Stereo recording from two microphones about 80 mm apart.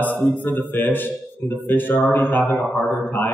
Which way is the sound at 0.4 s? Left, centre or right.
Left.